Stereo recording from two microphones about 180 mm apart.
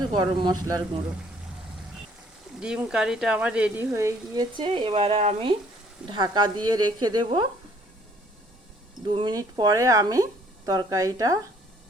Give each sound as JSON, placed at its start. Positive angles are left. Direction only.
{"t": 0.0, "sound": "a woman's voice", "side_deg": -25}
{"t": 2.6, "sound": "speech", "side_deg": -5}
{"t": 4.5, "sound": "a woman's voice", "side_deg": -25}
{"t": 9.0, "sound": "a woman's voice", "side_deg": -25}